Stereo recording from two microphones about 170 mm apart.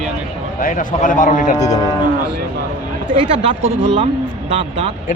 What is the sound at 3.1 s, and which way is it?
Speech, 35° right (ahead or behind).